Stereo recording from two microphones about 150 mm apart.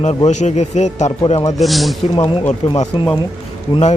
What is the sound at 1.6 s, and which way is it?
Speech, centre (ahead or behind).